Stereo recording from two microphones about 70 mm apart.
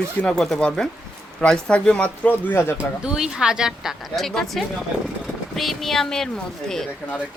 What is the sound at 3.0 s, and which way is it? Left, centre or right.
Speech, centre.